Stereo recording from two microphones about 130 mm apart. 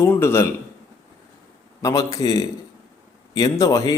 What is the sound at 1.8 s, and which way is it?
A man's voice, 25° left (ahead or behind).